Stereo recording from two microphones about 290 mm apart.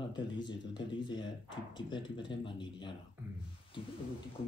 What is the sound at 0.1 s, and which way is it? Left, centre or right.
Speech, centre.